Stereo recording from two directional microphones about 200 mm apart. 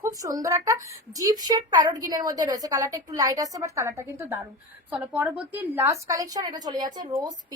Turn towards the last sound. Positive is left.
turn(degrees=-20)  # may be behind; listen again after turning